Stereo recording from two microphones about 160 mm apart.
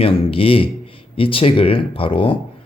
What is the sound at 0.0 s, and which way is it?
Speech, 35° left (ahead or behind).